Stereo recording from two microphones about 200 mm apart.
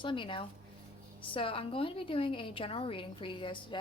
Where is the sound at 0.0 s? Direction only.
25° left (ahead or behind).